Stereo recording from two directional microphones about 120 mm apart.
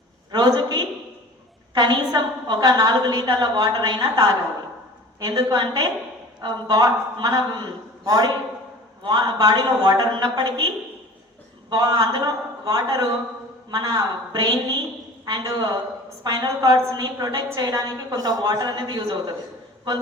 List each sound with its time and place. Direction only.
0.3 s a sound: 35° right (ahead or behind)
1.7 s a woman's voice: 35° right (ahead or behind)
11.7 s a woman's voice: 30° right (ahead or behind)